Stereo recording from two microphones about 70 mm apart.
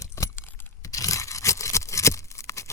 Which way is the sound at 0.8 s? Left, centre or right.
Left.